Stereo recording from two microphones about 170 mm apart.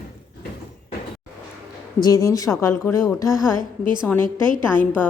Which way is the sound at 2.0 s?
20° left (ahead or behind).